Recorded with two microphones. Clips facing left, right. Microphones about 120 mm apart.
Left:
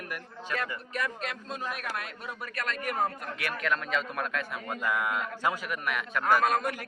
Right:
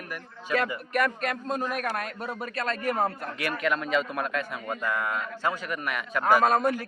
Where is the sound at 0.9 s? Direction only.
60° right (ahead or behind); by 2.3 s 40° right (ahead or behind).